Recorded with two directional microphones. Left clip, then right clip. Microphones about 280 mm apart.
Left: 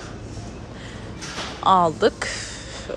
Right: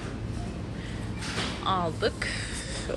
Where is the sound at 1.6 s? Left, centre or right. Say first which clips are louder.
Left 12 dB; centre.